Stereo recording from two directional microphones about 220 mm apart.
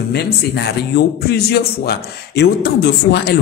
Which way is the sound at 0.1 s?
50° left (ahead or behind).